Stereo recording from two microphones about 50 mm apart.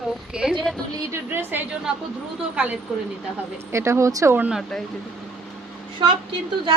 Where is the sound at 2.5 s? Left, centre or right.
Right.